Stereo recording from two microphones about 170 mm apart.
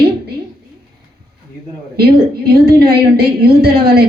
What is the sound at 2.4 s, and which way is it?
Speech, 65° right (ahead or behind).